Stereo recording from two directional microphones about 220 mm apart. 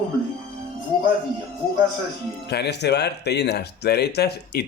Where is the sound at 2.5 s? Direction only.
50° left (ahead or behind).